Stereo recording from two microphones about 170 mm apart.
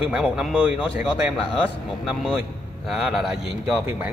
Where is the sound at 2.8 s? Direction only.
Centre (ahead or behind).